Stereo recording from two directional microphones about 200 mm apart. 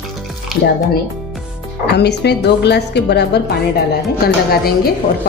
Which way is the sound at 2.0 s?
55° left (ahead or behind).